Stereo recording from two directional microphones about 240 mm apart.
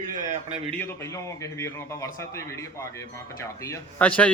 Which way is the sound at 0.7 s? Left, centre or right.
Centre.